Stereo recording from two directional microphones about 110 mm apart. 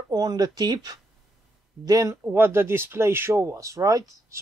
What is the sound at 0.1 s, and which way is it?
Speech, 35° right (ahead or behind).